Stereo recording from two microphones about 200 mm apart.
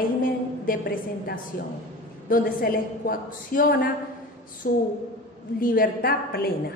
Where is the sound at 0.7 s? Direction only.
45° left (ahead or behind).